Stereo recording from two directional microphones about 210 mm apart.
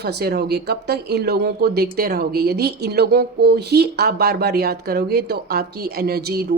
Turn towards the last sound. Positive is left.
turn(degrees=-45)  # may be behind; listen again after turning